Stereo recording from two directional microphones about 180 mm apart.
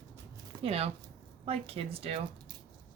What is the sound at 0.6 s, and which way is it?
Speech, 35° right (ahead or behind).